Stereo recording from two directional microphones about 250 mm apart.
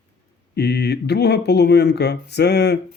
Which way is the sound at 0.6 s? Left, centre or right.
Left.